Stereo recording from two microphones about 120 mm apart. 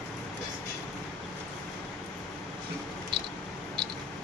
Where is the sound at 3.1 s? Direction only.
40° right (ahead or behind).